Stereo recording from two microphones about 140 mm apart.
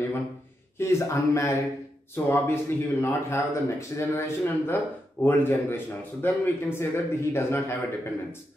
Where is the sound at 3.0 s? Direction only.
20° left (ahead or behind).